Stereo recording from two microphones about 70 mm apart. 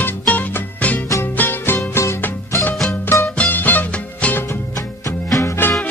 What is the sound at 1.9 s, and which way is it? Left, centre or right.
Music, left.